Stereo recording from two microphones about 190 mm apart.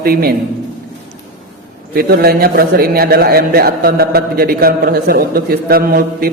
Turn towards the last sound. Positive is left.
turn(degrees=-50)  # may be behind; listen again after turning